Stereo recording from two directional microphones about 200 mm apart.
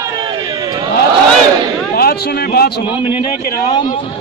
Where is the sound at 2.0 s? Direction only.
50° left (ahead or behind).